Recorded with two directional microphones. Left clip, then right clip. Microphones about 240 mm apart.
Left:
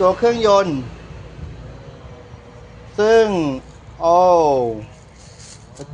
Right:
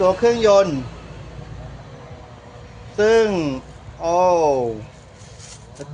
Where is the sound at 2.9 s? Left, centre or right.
Centre.